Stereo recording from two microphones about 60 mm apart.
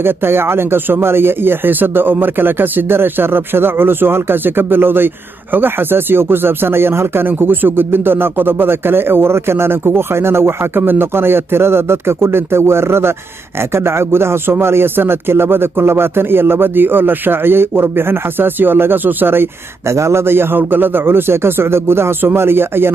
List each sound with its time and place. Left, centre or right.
0.0 s speech: right